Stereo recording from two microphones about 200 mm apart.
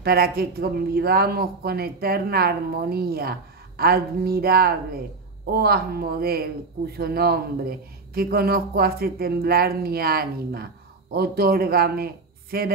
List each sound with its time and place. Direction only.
0.0 s speech: 50° right (ahead or behind)